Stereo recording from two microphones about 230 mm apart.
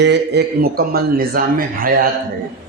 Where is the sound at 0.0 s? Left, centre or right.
Right.